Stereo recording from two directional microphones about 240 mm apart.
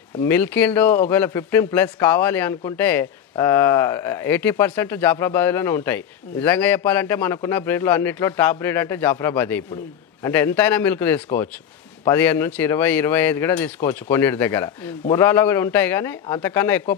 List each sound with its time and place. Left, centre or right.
0.2 s speech: centre